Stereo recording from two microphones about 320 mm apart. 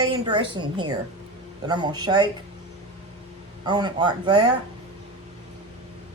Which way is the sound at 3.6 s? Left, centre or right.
Centre.